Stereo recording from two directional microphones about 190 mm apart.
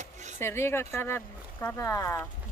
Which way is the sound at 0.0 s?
40° right (ahead or behind).